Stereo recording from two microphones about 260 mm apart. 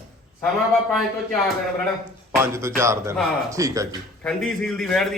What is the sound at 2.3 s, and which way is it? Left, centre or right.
Speech, centre.